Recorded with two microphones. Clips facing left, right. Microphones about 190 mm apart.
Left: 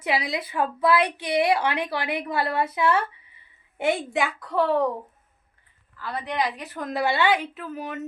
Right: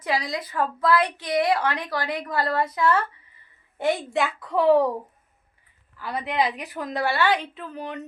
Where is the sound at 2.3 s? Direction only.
25° left (ahead or behind).